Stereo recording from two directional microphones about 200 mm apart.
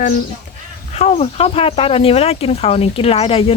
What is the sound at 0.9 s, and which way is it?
Speech, 30° left (ahead or behind).